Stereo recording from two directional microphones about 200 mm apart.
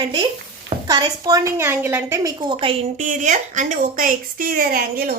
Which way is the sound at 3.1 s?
40° right (ahead or behind).